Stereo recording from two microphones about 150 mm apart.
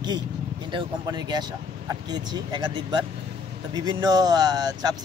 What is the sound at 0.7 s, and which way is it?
Speech, 30° right (ahead or behind).